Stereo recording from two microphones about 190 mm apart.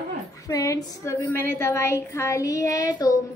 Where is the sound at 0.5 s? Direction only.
20° left (ahead or behind).